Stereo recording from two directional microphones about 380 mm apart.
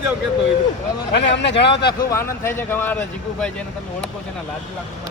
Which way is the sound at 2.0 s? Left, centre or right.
Centre.